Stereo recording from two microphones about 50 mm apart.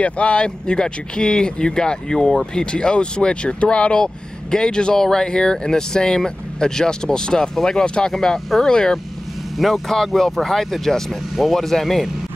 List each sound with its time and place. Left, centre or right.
0.0 s speech: left; by 12.1 s centre